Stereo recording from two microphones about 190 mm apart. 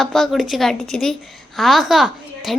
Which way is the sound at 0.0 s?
Centre (ahead or behind).